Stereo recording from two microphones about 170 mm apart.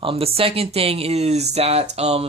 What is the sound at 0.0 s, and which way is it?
Speech, 35° right (ahead or behind).